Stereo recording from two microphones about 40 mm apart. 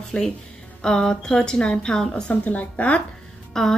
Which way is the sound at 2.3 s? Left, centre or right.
Left.